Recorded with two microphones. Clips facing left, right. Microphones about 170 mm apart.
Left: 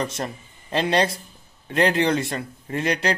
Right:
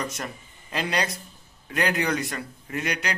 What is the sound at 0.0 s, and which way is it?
Speech, 30° left (ahead or behind).